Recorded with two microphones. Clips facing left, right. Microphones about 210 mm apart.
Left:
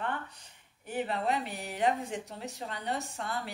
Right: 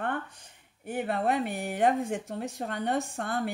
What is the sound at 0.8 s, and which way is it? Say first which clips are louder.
Speech: right 3 dB; 55° right (ahead or behind).